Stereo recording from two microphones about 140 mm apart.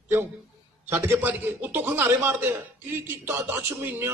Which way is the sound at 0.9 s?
15° right (ahead or behind).